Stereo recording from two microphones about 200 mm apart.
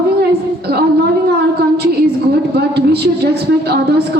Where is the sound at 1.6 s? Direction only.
55° right (ahead or behind).